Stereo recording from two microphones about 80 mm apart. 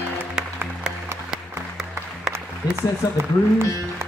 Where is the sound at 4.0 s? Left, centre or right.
Right.